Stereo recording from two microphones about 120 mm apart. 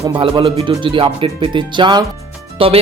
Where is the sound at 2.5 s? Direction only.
50° right (ahead or behind).